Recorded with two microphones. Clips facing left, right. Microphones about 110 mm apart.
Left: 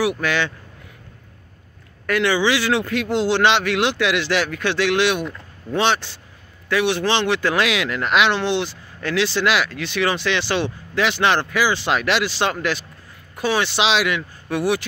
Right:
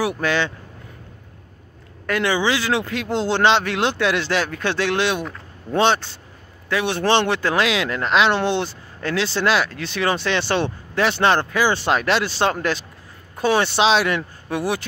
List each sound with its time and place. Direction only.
0.2 s a man's voice: 30° right (ahead or behind)
2.0 s a man's voice: 25° right (ahead or behind); by 7.3 s 45° right (ahead or behind)
7.4 s a man's voice: 25° right (ahead or behind)
8.3 s speech: 45° right (ahead or behind)